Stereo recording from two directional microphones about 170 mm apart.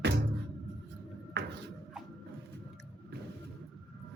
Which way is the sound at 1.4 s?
90° right.